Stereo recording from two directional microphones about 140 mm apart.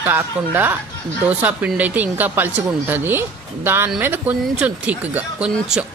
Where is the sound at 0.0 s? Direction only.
15° right (ahead or behind).